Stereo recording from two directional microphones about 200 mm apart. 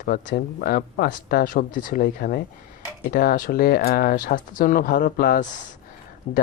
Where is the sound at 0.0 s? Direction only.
45° left (ahead or behind).